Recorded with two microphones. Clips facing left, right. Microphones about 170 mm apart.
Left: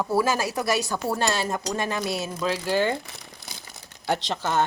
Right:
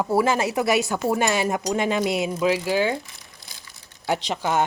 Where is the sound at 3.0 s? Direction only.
70° left (ahead or behind).